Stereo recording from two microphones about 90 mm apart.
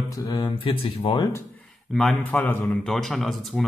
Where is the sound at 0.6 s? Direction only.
80° left.